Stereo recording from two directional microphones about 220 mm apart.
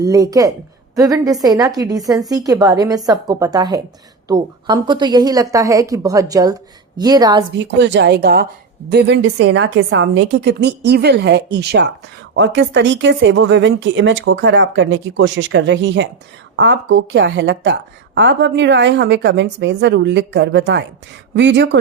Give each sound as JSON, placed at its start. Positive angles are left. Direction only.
{"t": 0.0, "sound": "a woman's voice", "side_deg": -15}
{"t": 7.6, "sound": "a woman's voice", "side_deg": -55}